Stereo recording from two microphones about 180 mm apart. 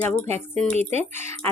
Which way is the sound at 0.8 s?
35° right (ahead or behind).